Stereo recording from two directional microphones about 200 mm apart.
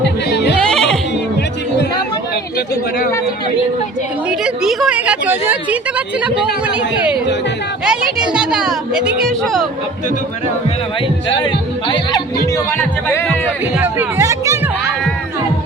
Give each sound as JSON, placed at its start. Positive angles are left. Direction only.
{"t": 0.0, "sound": "music", "side_deg": 55}
{"t": 0.7, "sound": "neigh", "side_deg": 0}
{"t": 4.3, "sound": "a sound", "side_deg": -5}
{"t": 6.7, "sound": "speech", "side_deg": -5}
{"t": 11.3, "sound": "music", "side_deg": 25}
{"t": 12.7, "sound": "music", "side_deg": 10}
{"t": 13.7, "sound": "music", "side_deg": -10}